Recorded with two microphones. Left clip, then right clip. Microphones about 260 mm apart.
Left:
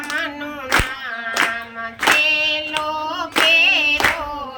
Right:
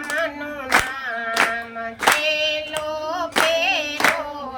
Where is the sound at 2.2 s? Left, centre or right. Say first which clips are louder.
Left 4 dB; centre.